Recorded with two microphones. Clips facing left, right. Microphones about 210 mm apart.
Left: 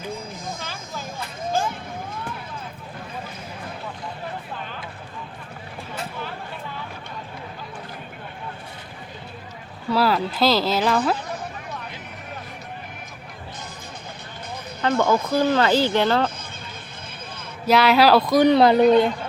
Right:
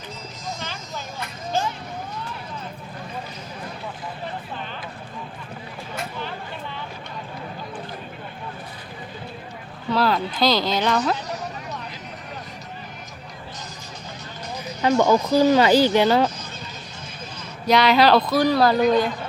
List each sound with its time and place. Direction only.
9.9 s speech: 5° left (ahead or behind)
14.8 s speech: 15° right (ahead or behind)
17.7 s speech: 5° left (ahead or behind); by 19.1 s 25° left (ahead or behind)